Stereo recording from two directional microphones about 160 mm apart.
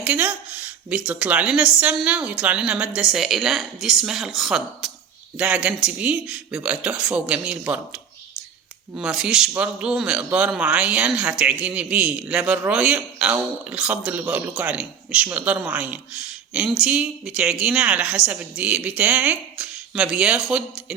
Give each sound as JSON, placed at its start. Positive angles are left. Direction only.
{"t": 0.0, "sound": "a woman's voice", "side_deg": -10}